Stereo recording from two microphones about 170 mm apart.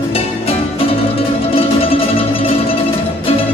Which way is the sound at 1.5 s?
35° left (ahead or behind).